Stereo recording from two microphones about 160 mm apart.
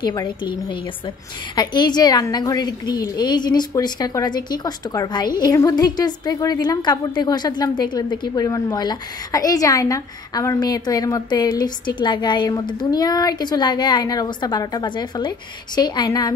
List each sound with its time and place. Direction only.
0.0 s a woman's voice: 25° left (ahead or behind)